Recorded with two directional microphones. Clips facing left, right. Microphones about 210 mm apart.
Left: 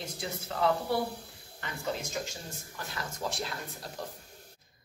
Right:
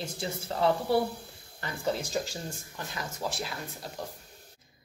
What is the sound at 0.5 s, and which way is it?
Speech, 35° right (ahead or behind).